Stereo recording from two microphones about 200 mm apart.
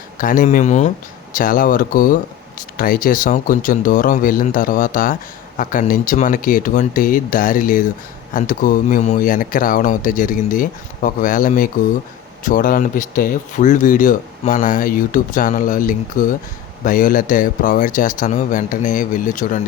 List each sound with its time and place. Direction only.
0.2 s speech: 45° left (ahead or behind)